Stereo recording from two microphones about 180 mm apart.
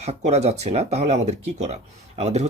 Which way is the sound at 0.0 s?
35° right (ahead or behind).